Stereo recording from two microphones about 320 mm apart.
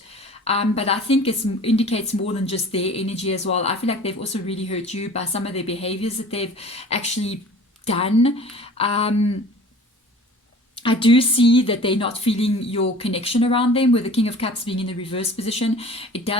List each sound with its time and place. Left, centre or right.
0.1 s speech: centre
10.8 s speech: centre